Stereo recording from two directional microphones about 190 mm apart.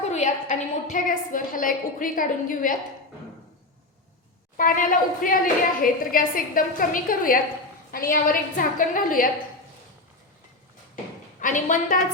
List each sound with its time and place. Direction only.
0.1 s a woman's voice: 35° left (ahead or behind)
4.5 s a woman's voice: 45° left (ahead or behind)
11.3 s a woman's voice: 45° left (ahead or behind)